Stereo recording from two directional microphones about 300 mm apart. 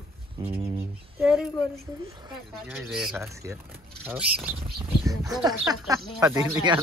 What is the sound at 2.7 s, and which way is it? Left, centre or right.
Speech, centre.